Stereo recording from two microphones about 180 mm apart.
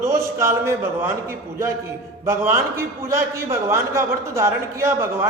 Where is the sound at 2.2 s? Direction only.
15° right (ahead or behind).